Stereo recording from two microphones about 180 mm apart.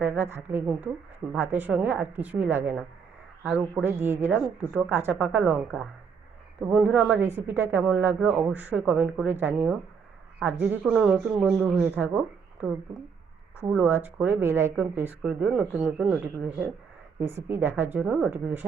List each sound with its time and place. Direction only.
0.0 s a woman's voice: 10° right (ahead or behind)